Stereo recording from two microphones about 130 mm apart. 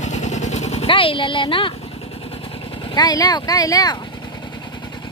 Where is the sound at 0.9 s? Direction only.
40° left (ahead or behind).